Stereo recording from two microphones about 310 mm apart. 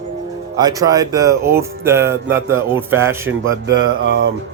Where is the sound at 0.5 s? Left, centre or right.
Centre.